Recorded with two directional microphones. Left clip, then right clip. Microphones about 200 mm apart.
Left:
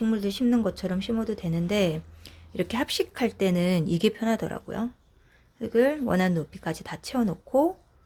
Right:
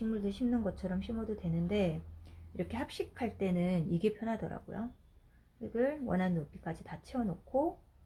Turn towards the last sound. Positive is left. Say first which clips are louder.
# left 10 dB
turn(degrees=50)  # may be behind; listen again after turning